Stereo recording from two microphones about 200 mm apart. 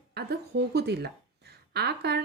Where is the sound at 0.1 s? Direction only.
55° right (ahead or behind).